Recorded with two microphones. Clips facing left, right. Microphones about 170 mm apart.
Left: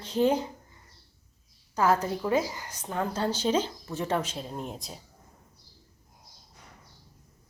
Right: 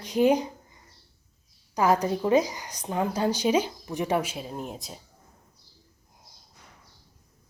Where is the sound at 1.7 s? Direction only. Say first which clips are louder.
Right 2 dB; 15° right (ahead or behind).